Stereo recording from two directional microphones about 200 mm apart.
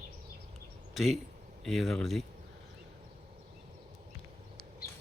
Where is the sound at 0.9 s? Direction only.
Centre (ahead or behind).